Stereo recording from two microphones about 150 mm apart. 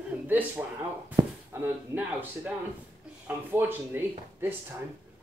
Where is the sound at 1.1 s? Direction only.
15° right (ahead or behind).